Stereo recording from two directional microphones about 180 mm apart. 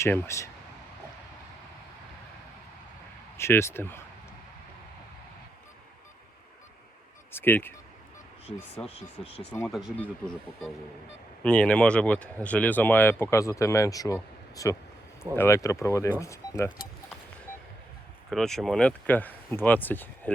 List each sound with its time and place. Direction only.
0.0 s speech: 15° left (ahead or behind)
3.3 s speech: 15° left (ahead or behind)
7.3 s speech: 10° left (ahead or behind)
8.9 s speech: 35° left (ahead or behind)
9.6 s speech: centre (ahead or behind); by 16.6 s 15° left (ahead or behind)
18.3 s speech: centre (ahead or behind)